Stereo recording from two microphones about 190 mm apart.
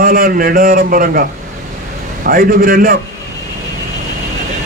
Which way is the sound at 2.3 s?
50° right (ahead or behind).